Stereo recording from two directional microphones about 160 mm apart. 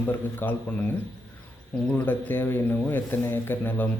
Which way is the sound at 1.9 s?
10° left (ahead or behind).